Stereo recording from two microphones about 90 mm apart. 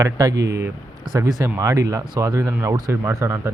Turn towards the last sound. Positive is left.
turn(degrees=-30)  # may be behind; listen again after turning